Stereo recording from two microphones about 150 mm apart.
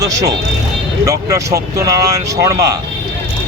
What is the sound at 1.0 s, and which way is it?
Speech, 20° right (ahead or behind).